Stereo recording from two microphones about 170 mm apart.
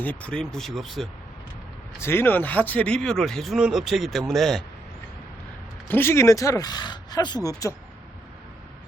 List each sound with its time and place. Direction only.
0.0 s speech: 10° left (ahead or behind)
2.0 s speech: 15° left (ahead or behind)
5.9 s speech: 15° left (ahead or behind)